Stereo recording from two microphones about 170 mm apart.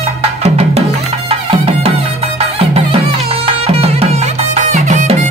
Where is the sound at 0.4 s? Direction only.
40° right (ahead or behind).